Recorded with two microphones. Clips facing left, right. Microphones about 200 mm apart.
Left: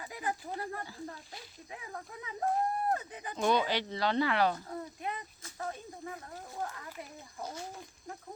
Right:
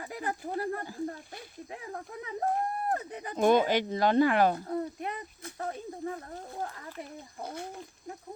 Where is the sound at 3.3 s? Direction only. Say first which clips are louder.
Right 6 dB; 50° right (ahead or behind).